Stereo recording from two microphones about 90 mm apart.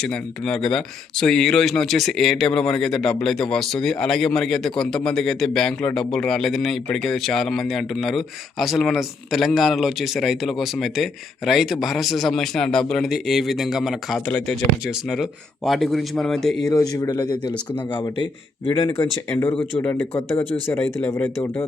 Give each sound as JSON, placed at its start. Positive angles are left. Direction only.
{"t": 0.0, "sound": "speech", "side_deg": 10}
{"t": 14.3, "sound": "speech", "side_deg": 10}
{"t": 14.8, "sound": "speech", "side_deg": -5}
{"t": 16.6, "sound": "speech", "side_deg": 40}
{"t": 17.1, "sound": "a man's voice", "side_deg": 55}
{"t": 18.9, "sound": "speech", "side_deg": 30}
{"t": 20.7, "sound": "speech", "side_deg": 10}
{"t": 21.1, "sound": "speech", "side_deg": 30}